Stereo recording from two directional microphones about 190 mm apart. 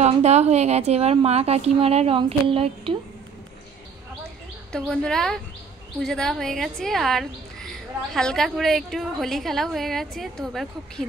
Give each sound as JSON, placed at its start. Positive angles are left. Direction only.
{"t": 0.0, "sound": "a woman's voice", "side_deg": -35}
{"t": 4.7, "sound": "a woman's voice", "side_deg": 5}